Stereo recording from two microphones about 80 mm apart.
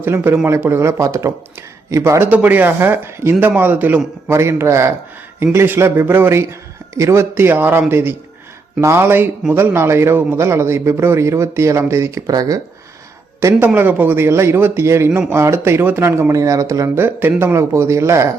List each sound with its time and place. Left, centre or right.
0.0 s a man's voice: right
4.3 s a man's voice: right
12.3 s speech: right
13.4 s a man's voice: right
13.7 s a man's voice: right
16.3 s a man's voice: right